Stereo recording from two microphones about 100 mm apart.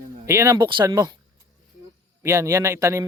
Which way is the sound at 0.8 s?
40° right (ahead or behind).